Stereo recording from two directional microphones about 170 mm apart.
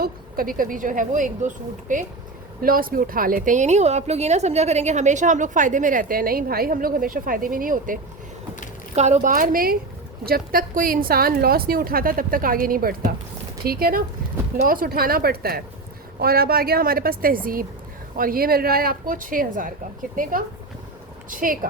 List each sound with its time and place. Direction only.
0.0 s speech: 55° right (ahead or behind)
9.0 s a woman's voice: 40° right (ahead or behind)
21.2 s speech: 55° right (ahead or behind)